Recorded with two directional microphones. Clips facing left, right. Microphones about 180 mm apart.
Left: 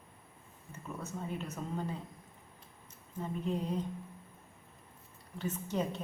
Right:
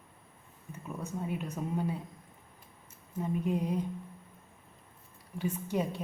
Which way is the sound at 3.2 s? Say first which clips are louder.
Right 4 dB; 10° right (ahead or behind).